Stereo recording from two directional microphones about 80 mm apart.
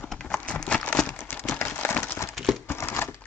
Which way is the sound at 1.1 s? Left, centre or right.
Left.